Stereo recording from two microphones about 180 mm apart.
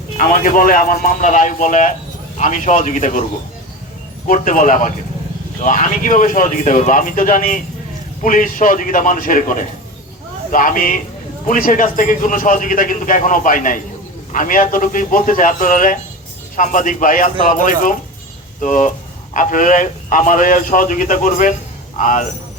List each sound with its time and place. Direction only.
0.2 s speech: 50° left (ahead or behind)
4.3 s speech: 45° left (ahead or behind)